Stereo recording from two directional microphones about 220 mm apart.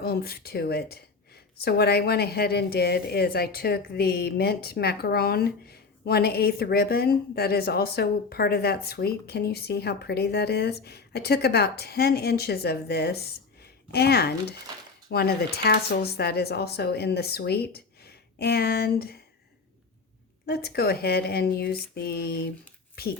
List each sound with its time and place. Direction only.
0.0 s a woman's voice: 45° left (ahead or behind)
20.5 s a woman's voice: 45° left (ahead or behind)